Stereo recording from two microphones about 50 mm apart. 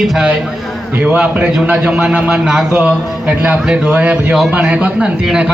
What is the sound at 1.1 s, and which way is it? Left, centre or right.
A man's voice, right.